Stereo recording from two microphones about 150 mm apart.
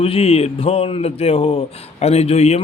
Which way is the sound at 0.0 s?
40° left (ahead or behind).